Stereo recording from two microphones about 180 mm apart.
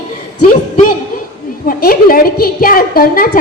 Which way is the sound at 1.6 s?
55° left (ahead or behind).